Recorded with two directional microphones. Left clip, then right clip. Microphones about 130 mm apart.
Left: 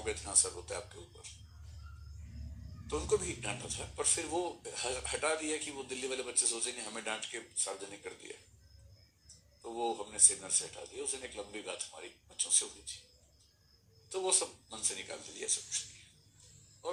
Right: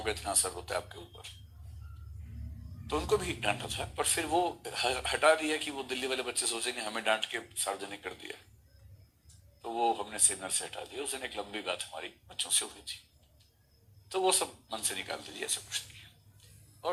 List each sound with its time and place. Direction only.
0.0 s a man's voice: 40° right (ahead or behind)
2.8 s a man's voice: 40° right (ahead or behind)
9.6 s a man's voice: 40° right (ahead or behind)
14.1 s a man's voice: 40° right (ahead or behind)